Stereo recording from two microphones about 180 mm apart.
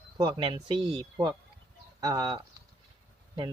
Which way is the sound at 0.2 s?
25° right (ahead or behind).